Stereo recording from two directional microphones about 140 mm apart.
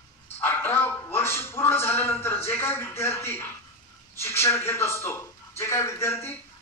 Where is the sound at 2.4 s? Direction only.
15° left (ahead or behind).